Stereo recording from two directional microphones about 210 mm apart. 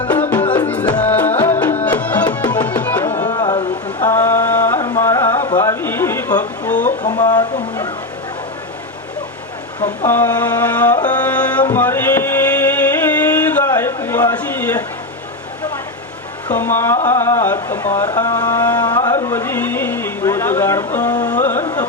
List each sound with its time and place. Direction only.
0.1 s music: 10° left (ahead or behind)
2.6 s tabla: 5° left (ahead or behind)
3.2 s music: 20° left (ahead or behind)
6.7 s a sound: 35° left (ahead or behind)
7.1 s a sound: 20° left (ahead or behind)
9.8 s music: 15° left (ahead or behind)
16.5 s speech: 10° left (ahead or behind)
18.9 s a sound: 15° left (ahead or behind)
21.4 s carnatic music: 10° left (ahead or behind)